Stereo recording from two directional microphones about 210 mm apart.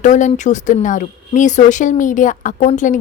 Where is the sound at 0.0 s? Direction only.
35° left (ahead or behind).